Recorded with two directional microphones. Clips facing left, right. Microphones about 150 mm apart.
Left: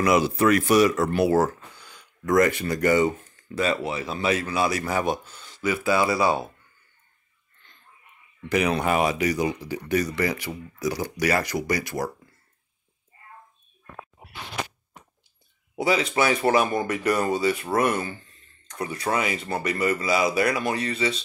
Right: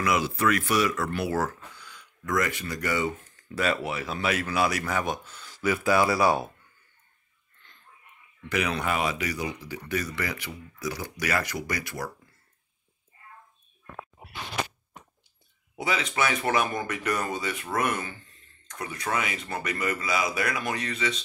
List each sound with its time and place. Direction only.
0.0 s speech: 35° left (ahead or behind)
3.5 s speech: 25° left (ahead or behind)
8.5 s speech: 35° left (ahead or behind)
15.7 s speech: 35° left (ahead or behind)